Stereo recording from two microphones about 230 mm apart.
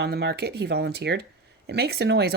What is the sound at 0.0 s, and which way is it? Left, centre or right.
Speech, right.